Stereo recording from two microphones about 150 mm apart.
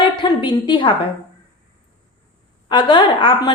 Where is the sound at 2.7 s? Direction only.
30° left (ahead or behind).